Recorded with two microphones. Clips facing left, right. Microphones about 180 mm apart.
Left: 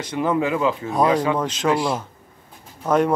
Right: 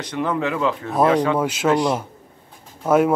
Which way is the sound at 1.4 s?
10° right (ahead or behind).